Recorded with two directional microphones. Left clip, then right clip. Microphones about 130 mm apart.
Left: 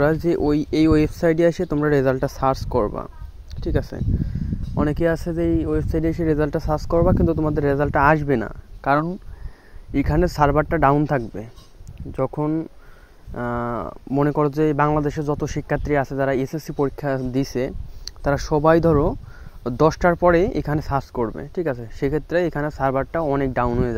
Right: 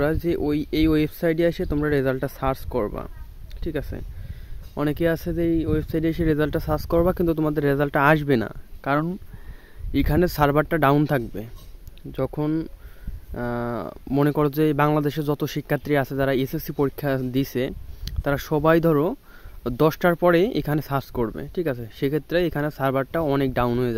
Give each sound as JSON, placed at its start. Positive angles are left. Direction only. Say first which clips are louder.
{"t": 0.0, "sound": "speech", "louder": "left 4 dB", "side_deg": 10}
{"t": 4.7, "sound": "speech", "louder": "left 2 dB", "side_deg": -5}
{"t": 7.9, "sound": "speech", "louder": "left 2 dB", "side_deg": -35}
{"t": 8.8, "sound": "speech", "louder": "left 4 dB", "side_deg": -5}
{"t": 9.9, "sound": "speech", "louder": "left 2 dB", "side_deg": -30}
{"t": 11.1, "sound": "speech", "louder": "left 2 dB", "side_deg": -15}
{"t": 14.5, "sound": "speech", "louder": "left 1 dB", "side_deg": -35}
{"t": 17.6, "sound": "speech", "louder": "left 2 dB", "side_deg": -5}
{"t": 19.6, "sound": "speech", "louder": "left 3 dB", "side_deg": -40}
{"t": 21.2, "sound": "speech", "louder": "left 2 dB", "side_deg": -25}
{"t": 21.5, "sound": "speech", "louder": "left 2 dB", "side_deg": -35}